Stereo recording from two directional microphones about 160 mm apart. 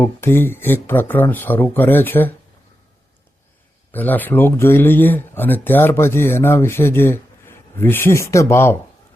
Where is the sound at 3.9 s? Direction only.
10° left (ahead or behind).